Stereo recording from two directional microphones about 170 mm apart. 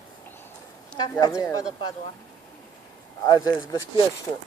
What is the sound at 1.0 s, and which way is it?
Speech, 20° left (ahead or behind).